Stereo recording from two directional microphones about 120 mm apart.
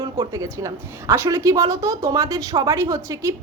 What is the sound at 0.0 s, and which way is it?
A woman's voice, 30° right (ahead or behind).